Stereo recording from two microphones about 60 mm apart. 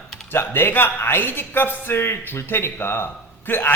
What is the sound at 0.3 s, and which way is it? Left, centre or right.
Speech, left.